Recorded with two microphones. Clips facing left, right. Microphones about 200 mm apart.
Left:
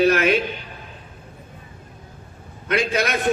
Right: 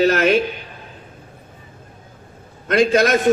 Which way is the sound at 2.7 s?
50° right (ahead or behind).